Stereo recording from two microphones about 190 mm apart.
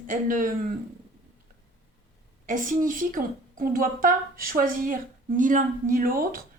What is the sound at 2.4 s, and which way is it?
A woman's voice, 45° right (ahead or behind).